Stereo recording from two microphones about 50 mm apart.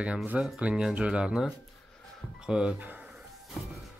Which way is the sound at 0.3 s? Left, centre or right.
Centre.